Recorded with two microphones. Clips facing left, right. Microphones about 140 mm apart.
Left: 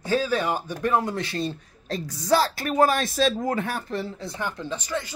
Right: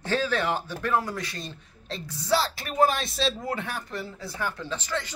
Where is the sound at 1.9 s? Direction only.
45° left (ahead or behind).